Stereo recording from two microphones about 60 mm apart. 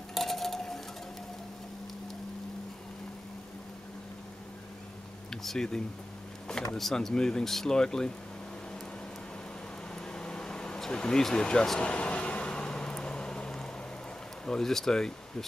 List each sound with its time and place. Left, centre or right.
0.1 s a sound: centre
5.3 s speech: centre
10.1 s vehicle: centre
14.4 s speech: centre